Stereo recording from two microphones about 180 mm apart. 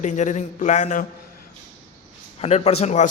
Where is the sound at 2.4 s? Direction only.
35° left (ahead or behind).